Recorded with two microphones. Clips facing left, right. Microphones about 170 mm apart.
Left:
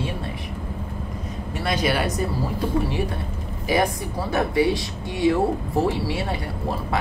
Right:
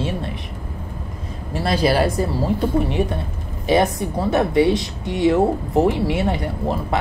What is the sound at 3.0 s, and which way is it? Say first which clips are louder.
Speech: right 5 dB; 20° right (ahead or behind).